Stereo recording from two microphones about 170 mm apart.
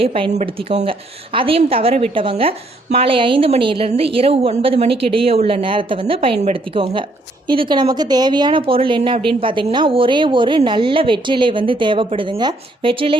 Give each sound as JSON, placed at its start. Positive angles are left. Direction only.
{"t": 0.0, "sound": "a woman's voice", "side_deg": -35}